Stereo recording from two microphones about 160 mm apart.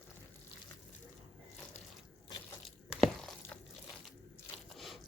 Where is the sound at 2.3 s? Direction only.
25° left (ahead or behind).